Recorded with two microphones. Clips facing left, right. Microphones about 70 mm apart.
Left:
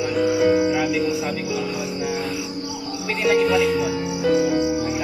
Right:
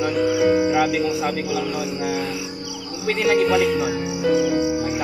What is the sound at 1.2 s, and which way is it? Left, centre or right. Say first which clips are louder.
Speech: right 2 dB; right.